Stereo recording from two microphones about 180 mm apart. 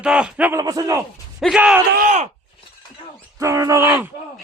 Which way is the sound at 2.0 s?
45° right (ahead or behind).